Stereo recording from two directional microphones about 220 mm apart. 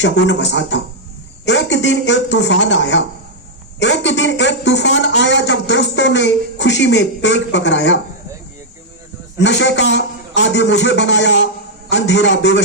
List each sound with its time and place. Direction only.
0.0 s a man's voice: 55° left (ahead or behind)
9.4 s a man's voice: 55° left (ahead or behind)